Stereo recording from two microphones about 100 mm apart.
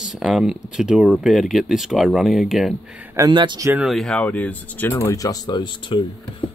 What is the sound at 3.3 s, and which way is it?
Speech, 50° right (ahead or behind).